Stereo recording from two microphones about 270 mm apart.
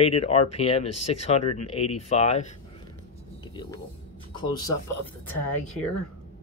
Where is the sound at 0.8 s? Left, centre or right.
Left.